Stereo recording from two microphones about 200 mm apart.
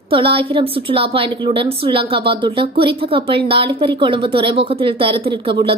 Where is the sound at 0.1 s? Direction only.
25° right (ahead or behind).